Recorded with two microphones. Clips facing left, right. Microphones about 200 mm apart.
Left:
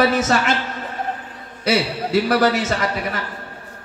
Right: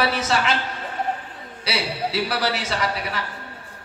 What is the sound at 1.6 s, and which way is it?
A man's voice, 50° left (ahead or behind).